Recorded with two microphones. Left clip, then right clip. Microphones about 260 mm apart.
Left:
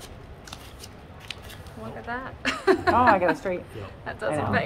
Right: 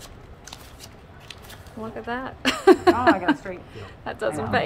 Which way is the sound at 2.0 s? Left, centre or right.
Right.